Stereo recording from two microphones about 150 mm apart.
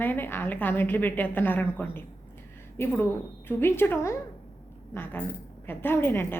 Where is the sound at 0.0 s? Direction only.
15° left (ahead or behind).